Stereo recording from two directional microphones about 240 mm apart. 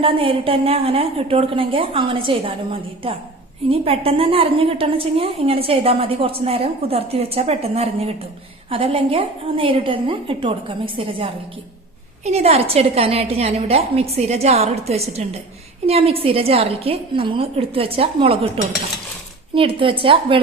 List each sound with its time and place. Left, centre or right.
0.0 s a woman's voice: right